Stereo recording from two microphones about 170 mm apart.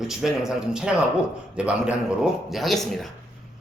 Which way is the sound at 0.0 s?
Centre (ahead or behind).